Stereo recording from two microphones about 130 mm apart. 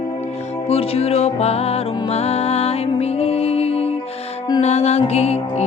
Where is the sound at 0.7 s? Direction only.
50° left (ahead or behind).